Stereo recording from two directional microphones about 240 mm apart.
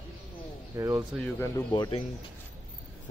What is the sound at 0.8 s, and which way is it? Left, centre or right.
Speech, centre.